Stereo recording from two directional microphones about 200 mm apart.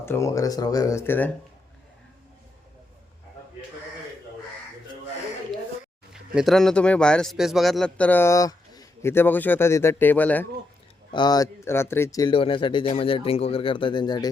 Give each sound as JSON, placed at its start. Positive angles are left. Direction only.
{"t": 0.0, "sound": "a man's voice", "side_deg": 15}
{"t": 6.1, "sound": "a man's voice", "side_deg": 0}
{"t": 11.1, "sound": "speech", "side_deg": 20}